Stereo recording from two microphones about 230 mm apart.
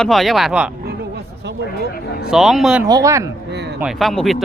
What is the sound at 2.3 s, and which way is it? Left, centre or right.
Speech, centre.